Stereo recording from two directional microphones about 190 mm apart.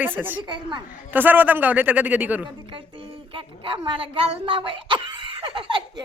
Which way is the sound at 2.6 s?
25° right (ahead or behind).